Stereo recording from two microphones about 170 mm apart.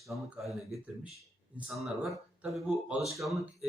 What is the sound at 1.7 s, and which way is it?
Speech, centre (ahead or behind).